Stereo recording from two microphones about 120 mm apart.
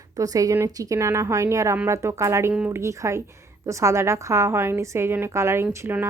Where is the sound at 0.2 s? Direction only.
30° right (ahead or behind).